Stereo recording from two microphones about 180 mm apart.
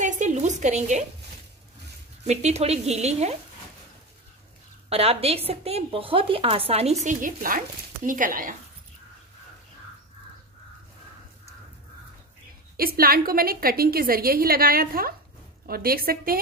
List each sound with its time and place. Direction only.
0.0 s a sound: 45° right (ahead or behind)
2.2 s speech: 35° right (ahead or behind)
4.8 s speech: 35° right (ahead or behind); by 8.5 s 50° right (ahead or behind)
12.7 s a woman's voice: 55° right (ahead or behind)